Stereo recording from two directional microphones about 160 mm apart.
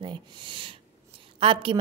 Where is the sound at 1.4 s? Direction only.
35° right (ahead or behind).